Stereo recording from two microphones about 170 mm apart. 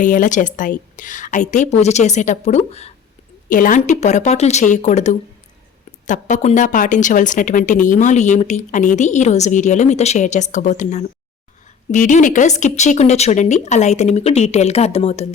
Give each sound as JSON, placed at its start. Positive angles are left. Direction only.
{"t": 0.0, "sound": "a woman's voice", "side_deg": 50}
{"t": 3.5, "sound": "a woman's voice", "side_deg": 50}